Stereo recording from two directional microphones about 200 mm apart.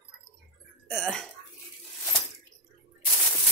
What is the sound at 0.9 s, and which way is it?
Speech, centre (ahead or behind).